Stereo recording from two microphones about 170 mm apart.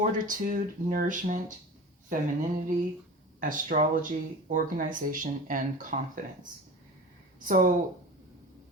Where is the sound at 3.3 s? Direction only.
50° right (ahead or behind).